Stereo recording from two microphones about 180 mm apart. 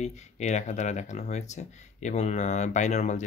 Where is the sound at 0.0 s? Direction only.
40° left (ahead or behind).